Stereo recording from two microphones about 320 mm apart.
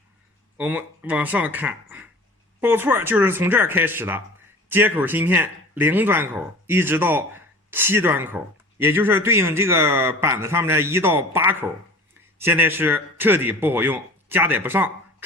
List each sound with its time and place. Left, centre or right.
0.5 s speech: centre